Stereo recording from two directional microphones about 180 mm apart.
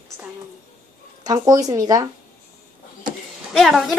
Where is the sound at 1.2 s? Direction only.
20° right (ahead or behind).